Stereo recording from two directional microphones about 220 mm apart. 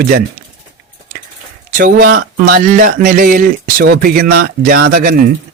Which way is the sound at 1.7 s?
40° right (ahead or behind).